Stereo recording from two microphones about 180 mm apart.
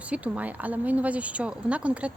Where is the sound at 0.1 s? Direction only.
10° right (ahead or behind).